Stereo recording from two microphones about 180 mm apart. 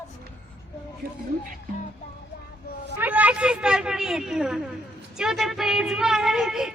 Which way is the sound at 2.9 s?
10° right (ahead or behind).